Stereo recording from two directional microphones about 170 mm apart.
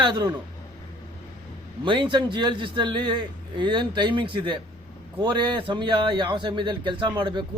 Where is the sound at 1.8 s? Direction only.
30° right (ahead or behind).